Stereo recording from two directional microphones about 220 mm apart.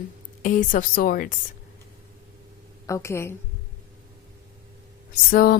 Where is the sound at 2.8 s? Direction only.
15° left (ahead or behind).